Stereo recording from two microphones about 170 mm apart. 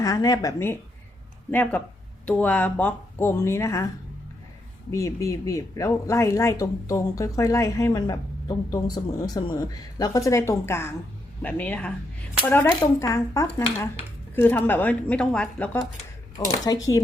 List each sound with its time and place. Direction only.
0.0 s speech: 20° left (ahead or behind)
4.9 s speech: 20° left (ahead or behind)
12.8 s speech: 20° left (ahead or behind)
16.4 s speech: 20° left (ahead or behind)